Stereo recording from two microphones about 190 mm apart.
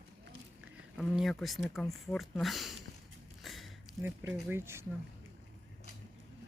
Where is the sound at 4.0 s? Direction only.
10° right (ahead or behind).